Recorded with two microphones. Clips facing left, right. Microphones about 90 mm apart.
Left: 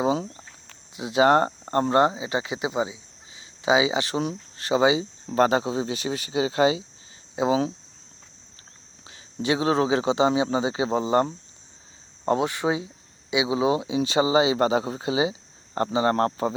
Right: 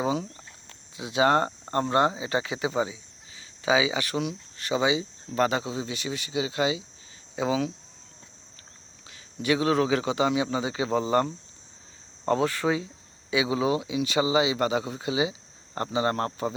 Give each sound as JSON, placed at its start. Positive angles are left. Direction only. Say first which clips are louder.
{"t": 0.0, "sound": "a sound", "louder": "left 4 dB", "side_deg": 30}
{"t": 0.9, "sound": "a man's voice", "louder": "left 4 dB", "side_deg": 25}
{"t": 9.0, "sound": "a man's voice", "louder": "left 1 dB", "side_deg": 25}